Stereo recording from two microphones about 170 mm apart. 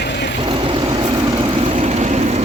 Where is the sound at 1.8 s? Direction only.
40° right (ahead or behind).